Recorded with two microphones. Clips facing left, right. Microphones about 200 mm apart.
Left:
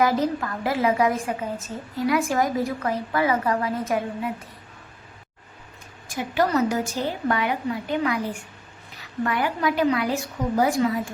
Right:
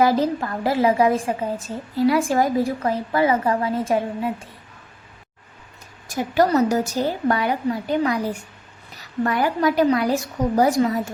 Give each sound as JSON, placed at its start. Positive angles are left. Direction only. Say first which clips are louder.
{"t": 0.0, "sound": "a woman's voice", "louder": "right 3 dB", "side_deg": -30}
{"t": 6.1, "sound": "a woman's voice", "louder": "right 4 dB", "side_deg": -40}